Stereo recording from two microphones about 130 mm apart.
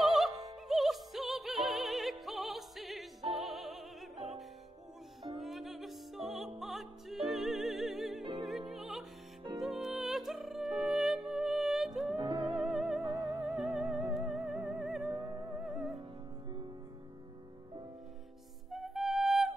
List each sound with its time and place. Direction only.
0.0 s music: centre (ahead or behind)
12.2 s music: 40° right (ahead or behind)
12.7 s music: centre (ahead or behind)
15.0 s music: 30° right (ahead or behind)
18.7 s music: centre (ahead or behind)